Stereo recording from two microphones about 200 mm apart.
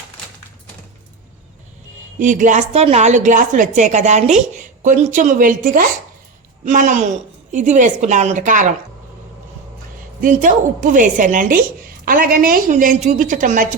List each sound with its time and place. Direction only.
2.1 s a woman's voice: 40° right (ahead or behind)
10.2 s a woman's voice: 40° right (ahead or behind)